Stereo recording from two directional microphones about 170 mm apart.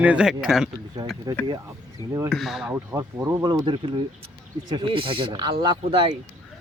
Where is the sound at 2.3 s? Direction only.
Centre (ahead or behind).